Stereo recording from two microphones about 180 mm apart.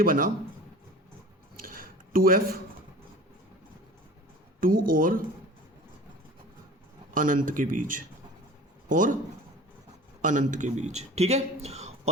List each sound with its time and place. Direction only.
0.0 s a man's voice: 50° right (ahead or behind)
1.6 s a sound: 50° right (ahead or behind)
4.6 s a man's voice: 50° right (ahead or behind)
7.1 s a man's voice: 50° right (ahead or behind)
10.2 s a man's voice: 45° right (ahead or behind)